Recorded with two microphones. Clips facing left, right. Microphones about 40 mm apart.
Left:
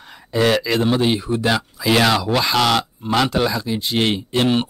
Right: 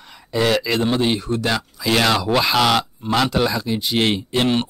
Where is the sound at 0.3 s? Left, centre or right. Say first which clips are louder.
Left 1 dB; centre.